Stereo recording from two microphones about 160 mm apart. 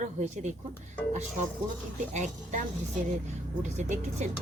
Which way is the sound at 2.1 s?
50° right (ahead or behind).